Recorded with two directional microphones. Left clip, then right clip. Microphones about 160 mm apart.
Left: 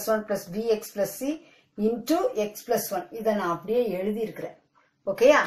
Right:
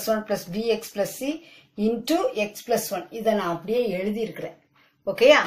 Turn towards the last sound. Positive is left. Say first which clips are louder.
# right 2 dB
turn(degrees=5)  # may be behind; listen again after turning